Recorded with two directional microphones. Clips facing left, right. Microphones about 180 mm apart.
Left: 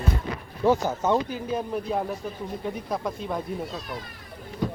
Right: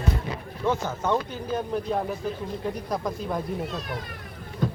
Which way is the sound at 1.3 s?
Centre (ahead or behind).